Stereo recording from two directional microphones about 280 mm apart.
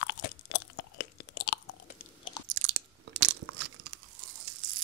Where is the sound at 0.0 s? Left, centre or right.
Left.